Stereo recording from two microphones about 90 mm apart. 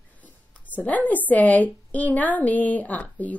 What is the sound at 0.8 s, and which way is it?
A woman's voice, 15° left (ahead or behind).